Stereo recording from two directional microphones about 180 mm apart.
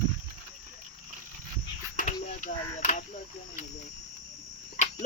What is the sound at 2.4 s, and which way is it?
Speech, 45° left (ahead or behind).